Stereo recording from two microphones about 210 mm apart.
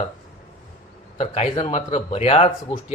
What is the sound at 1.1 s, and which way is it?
Speech, 30° left (ahead or behind).